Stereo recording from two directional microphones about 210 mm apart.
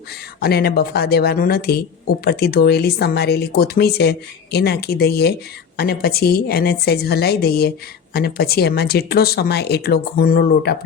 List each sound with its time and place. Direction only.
0.4 s speech: 50° left (ahead or behind)